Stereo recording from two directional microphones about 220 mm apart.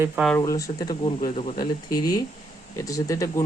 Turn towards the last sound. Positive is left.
turn(degrees=15)  # may be behind; listen again after turning